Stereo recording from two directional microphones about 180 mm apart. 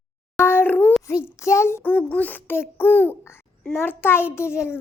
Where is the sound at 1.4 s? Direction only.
15° left (ahead or behind).